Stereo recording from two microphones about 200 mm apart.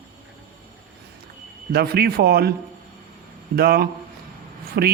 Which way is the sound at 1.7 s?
50° right (ahead or behind).